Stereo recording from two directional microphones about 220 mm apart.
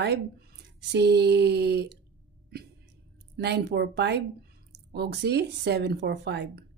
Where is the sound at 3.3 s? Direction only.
50° right (ahead or behind).